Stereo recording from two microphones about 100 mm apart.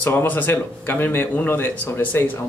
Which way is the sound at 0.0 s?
20° left (ahead or behind).